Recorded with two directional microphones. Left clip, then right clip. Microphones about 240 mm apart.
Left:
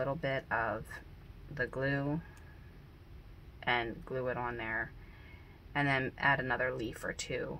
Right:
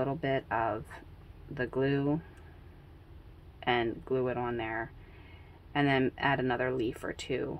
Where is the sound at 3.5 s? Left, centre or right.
Right.